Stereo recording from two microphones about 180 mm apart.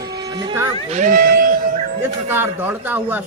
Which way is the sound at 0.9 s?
45° right (ahead or behind).